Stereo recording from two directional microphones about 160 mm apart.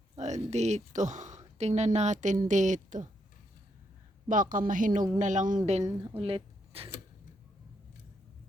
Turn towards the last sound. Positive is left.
turn(degrees=-35)  # may be behind; listen again after turning